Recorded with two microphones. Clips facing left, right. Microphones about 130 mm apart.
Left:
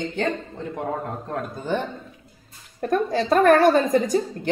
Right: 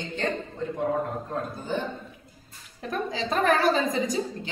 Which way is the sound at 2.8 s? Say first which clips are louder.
Left 8 dB; 50° left (ahead or behind).